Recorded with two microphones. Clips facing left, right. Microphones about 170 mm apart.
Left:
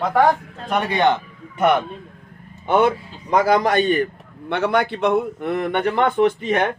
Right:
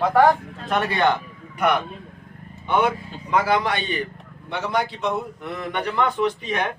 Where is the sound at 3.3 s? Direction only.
40° left (ahead or behind).